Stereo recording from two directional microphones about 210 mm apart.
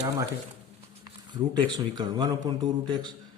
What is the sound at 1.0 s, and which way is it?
A man's voice, 20° right (ahead or behind).